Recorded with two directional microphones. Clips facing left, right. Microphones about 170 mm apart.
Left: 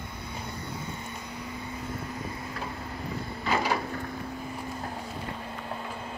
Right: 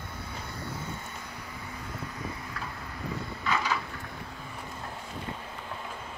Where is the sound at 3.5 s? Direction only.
35° left (ahead or behind).